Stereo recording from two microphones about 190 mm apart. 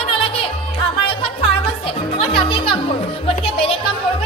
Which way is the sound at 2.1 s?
30° left (ahead or behind).